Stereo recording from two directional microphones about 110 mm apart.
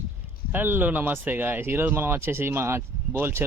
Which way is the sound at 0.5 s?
20° right (ahead or behind).